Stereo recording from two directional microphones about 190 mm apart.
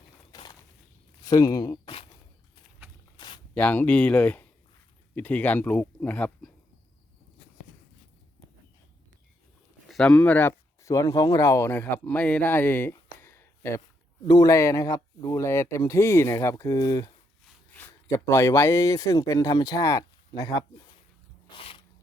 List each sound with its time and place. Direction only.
0.3 s walk: 20° left (ahead or behind)
1.2 s speech: 20° left (ahead or behind)
3.2 s a sound: 25° left (ahead or behind)
3.5 s speech: 10° left (ahead or behind)
9.9 s speech: 5° left (ahead or behind); by 17.1 s 20° left (ahead or behind)
18.1 s speech: 15° left (ahead or behind)
21.5 s a sound: 30° left (ahead or behind)